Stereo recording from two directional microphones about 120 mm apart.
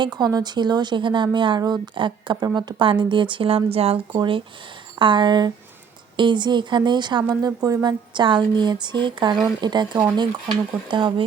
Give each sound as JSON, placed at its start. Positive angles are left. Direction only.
{"t": 0.0, "sound": "speech", "side_deg": -35}
{"t": 4.1, "sound": "speech", "side_deg": -40}